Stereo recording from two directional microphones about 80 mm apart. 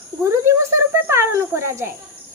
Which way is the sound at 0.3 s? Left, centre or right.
Right.